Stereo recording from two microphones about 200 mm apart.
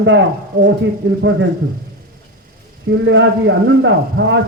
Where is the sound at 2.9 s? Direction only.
65° right (ahead or behind).